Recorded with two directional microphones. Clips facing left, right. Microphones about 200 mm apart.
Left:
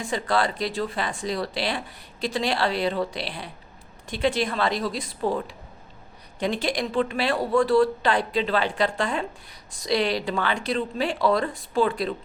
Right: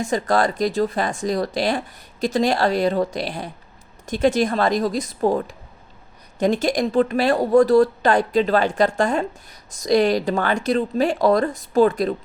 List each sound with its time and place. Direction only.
0.0 s speech: 45° right (ahead or behind)